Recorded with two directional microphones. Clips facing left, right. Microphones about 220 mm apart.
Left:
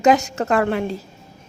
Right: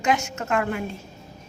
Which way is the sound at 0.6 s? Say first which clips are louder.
Left 7 dB; 90° left.